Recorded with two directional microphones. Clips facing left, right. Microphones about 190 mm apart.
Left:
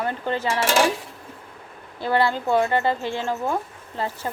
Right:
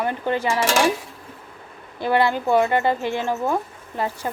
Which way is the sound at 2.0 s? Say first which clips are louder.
Right 2 dB; 15° right (ahead or behind).